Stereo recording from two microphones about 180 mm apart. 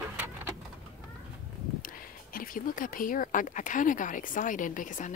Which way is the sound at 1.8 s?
50° left (ahead or behind).